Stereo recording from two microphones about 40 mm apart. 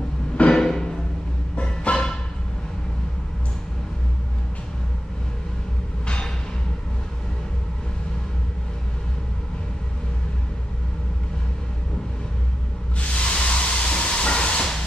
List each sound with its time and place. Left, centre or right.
0.6 s music: centre
1.6 s music: left
6.0 s a sound: left
13.0 s hiss: left